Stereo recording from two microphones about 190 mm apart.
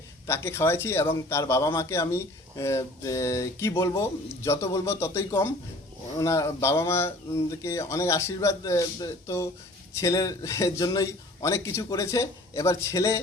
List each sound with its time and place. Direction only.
0.3 s speech: 15° left (ahead or behind)